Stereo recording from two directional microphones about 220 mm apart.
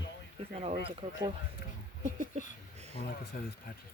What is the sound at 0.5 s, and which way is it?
Speech, 30° right (ahead or behind).